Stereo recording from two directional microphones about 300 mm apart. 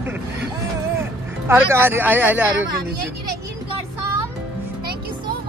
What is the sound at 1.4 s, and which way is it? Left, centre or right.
Speech, centre.